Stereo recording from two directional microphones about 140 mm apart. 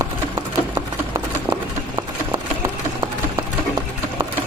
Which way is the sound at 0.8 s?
20° right (ahead or behind).